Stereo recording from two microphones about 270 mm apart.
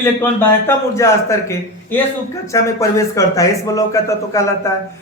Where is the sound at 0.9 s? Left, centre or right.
Centre.